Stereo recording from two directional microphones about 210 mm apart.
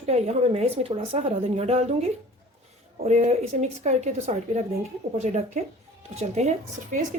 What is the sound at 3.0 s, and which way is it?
Speech, 30° right (ahead or behind).